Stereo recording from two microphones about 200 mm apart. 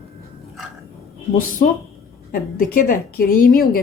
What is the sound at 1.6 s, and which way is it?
A woman's voice, 45° left (ahead or behind).